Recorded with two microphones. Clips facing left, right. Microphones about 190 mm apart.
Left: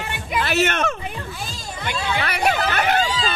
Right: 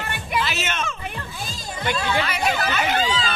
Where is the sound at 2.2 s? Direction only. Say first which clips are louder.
Left 2 dB; 60° left (ahead or behind).